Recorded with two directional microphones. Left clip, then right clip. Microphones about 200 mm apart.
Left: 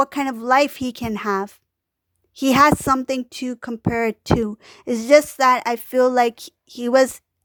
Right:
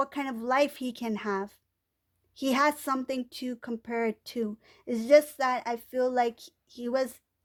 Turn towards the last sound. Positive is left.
turn(degrees=40)  # may be behind; listen again after turning